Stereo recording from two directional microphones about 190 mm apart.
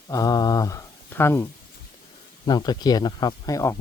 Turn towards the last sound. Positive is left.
turn(degrees=15)  # may be behind; listen again after turning